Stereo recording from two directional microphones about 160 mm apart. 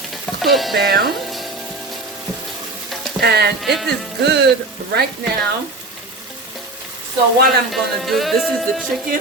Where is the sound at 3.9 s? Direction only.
90° right.